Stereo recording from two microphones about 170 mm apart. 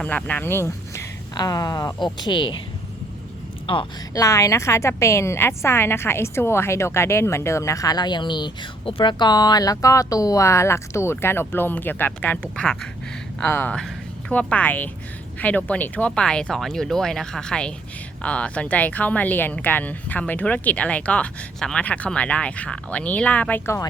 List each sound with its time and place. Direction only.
0.0 s speech: 10° left (ahead or behind); by 2.6 s 25° left (ahead or behind)
3.7 s a woman's voice: 30° left (ahead or behind)
4.1 s a woman's voice: 20° left (ahead or behind)